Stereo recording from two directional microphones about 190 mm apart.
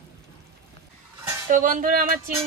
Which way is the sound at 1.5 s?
45° right (ahead or behind).